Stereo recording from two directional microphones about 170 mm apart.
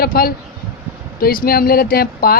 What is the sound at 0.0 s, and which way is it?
Speech, 60° left (ahead or behind).